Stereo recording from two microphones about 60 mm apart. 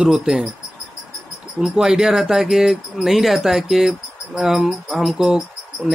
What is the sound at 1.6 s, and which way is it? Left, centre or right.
Speech, centre.